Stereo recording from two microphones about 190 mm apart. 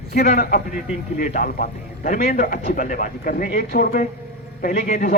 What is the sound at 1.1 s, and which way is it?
A man's voice, 50° left (ahead or behind).